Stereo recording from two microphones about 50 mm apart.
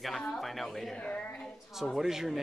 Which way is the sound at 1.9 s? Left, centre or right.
Centre.